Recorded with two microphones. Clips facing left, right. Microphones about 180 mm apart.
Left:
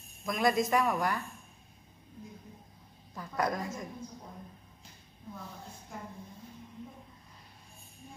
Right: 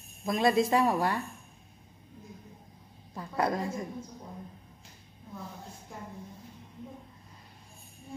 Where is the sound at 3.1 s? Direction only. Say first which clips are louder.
Right 3 dB; 25° right (ahead or behind).